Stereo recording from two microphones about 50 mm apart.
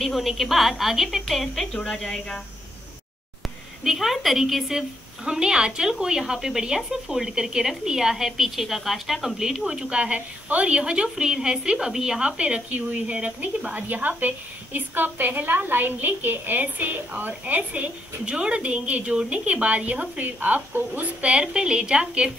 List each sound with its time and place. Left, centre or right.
0.0 s a woman's voice: centre
2.0 s speech: centre
3.8 s a woman's voice: centre
5.2 s speech: centre; by 21.1 s right
21.2 s speech: centre